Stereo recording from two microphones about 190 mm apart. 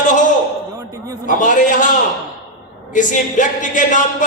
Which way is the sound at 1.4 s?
45° left (ahead or behind).